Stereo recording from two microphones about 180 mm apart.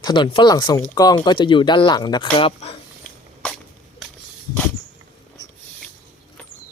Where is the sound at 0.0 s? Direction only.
25° left (ahead or behind).